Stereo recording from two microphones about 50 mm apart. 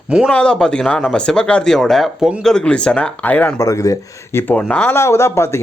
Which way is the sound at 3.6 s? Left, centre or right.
Left.